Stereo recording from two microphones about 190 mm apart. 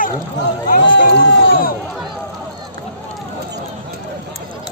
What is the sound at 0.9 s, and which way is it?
Run, 80° left.